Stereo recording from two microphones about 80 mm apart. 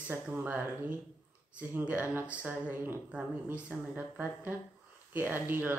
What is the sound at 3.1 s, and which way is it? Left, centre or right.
Speech, centre.